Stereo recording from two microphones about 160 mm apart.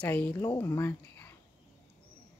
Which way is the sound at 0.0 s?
10° left (ahead or behind).